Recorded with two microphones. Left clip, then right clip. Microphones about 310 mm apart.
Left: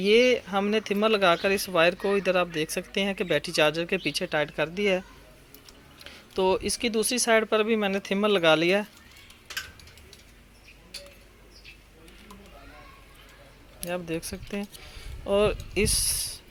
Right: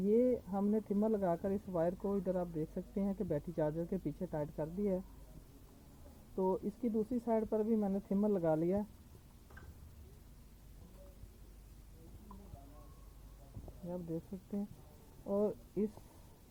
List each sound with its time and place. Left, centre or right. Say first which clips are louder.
0.0 s speech: left 12 dB; left
6.3 s speech: left 12 dB; left
13.8 s speech: left 12 dB; left